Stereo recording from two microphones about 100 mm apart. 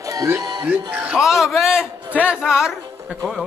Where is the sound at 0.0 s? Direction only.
35° right (ahead or behind).